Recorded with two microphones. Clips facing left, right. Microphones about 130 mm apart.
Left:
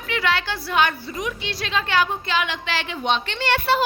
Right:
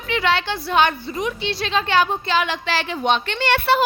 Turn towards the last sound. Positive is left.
turn(degrees=-65)  # may be behind; listen again after turning